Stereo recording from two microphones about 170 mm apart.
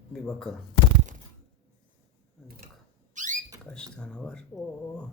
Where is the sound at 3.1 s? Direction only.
50° right (ahead or behind).